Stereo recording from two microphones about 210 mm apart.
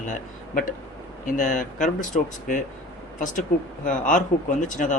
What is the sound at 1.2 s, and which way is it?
Speech, 35° left (ahead or behind).